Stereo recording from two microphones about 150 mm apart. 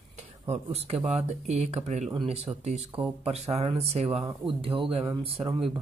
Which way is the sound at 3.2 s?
45° right (ahead or behind).